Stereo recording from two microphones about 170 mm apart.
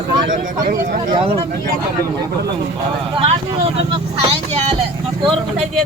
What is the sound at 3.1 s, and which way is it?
Speech, 35° right (ahead or behind).